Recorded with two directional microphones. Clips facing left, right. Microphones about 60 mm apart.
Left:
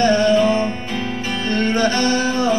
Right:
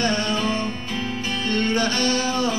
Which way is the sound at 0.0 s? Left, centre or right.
Left.